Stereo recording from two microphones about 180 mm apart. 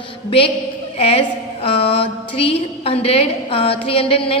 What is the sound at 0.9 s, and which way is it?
A woman's voice, 35° left (ahead or behind).